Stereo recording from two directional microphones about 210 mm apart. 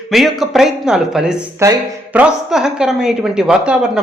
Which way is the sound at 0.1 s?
Centre (ahead or behind).